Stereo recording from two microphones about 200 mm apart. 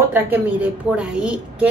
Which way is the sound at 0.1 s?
10° right (ahead or behind).